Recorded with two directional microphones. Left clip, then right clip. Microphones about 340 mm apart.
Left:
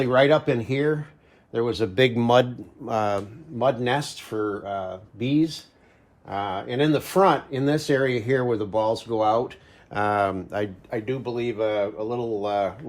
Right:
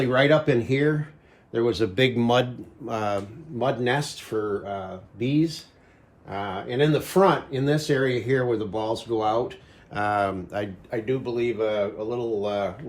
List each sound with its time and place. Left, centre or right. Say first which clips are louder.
0.0 s speech: left 1 dB; centre